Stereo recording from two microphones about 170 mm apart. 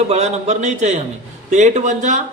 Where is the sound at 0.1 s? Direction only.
40° right (ahead or behind).